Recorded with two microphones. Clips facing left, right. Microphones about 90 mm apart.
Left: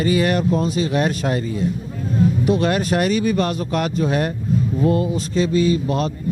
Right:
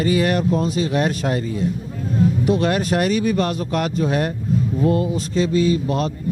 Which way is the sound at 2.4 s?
15° left (ahead or behind).